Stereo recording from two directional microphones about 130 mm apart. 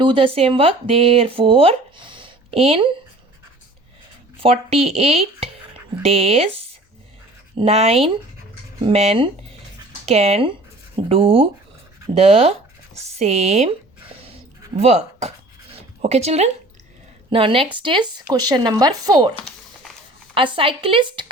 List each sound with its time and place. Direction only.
0.0 s speech: 40° right (ahead or behind)
4.4 s speech: 45° right (ahead or behind)
17.3 s speech: 45° right (ahead or behind)
20.3 s speech: 45° right (ahead or behind)